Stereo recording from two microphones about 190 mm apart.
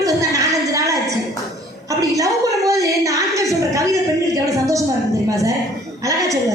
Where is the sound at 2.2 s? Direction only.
15° right (ahead or behind).